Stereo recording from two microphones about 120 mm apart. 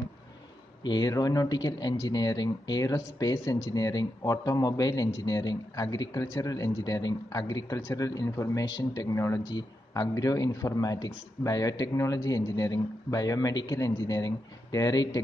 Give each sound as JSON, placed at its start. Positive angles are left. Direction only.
{"t": 0.8, "sound": "speech", "side_deg": 35}